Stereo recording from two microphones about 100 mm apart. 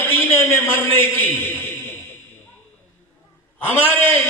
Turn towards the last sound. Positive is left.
turn(degrees=25)  # may be behind; listen again after turning